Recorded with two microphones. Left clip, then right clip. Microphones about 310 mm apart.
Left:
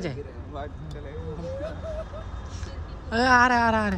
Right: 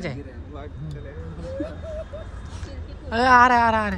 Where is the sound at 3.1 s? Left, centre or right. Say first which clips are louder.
Right 4 dB; centre.